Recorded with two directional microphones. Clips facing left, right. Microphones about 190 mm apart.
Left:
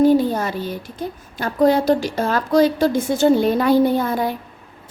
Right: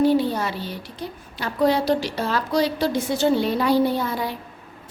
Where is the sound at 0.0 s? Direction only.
45° left (ahead or behind).